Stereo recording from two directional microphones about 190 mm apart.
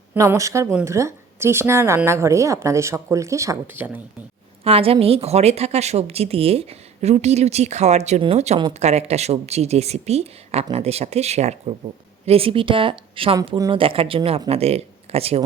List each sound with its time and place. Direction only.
0.1 s a woman's voice: 15° right (ahead or behind)
4.6 s speech: 30° right (ahead or behind)